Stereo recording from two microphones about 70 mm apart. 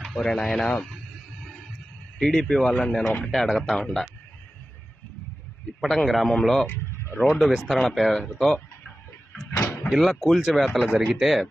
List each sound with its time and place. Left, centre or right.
0.1 s speech: centre
0.9 s a sound: centre
2.1 s speech: centre
5.8 s speech: centre
6.6 s a sound: left
7.2 s speech: centre
9.8 s speech: centre